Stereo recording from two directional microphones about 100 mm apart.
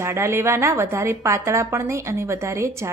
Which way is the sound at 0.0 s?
25° right (ahead or behind).